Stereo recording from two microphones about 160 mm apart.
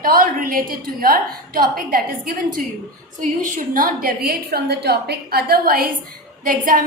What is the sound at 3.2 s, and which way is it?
A woman's voice, 60° right (ahead or behind).